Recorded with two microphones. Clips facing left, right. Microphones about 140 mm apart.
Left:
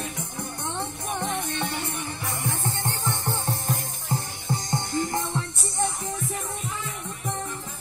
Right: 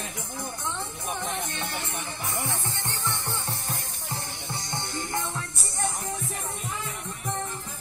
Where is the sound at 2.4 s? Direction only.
45° left (ahead or behind).